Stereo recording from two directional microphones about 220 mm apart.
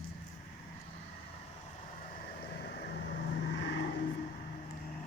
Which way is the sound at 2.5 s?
45° left (ahead or behind).